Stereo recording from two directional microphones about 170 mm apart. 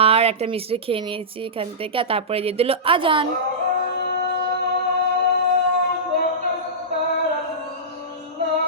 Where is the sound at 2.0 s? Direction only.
35° right (ahead or behind).